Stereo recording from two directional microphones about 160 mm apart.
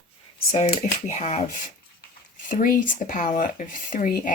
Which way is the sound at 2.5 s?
60° left (ahead or behind).